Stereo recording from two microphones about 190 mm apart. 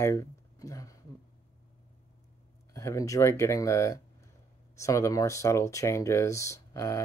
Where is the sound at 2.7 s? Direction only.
15° left (ahead or behind).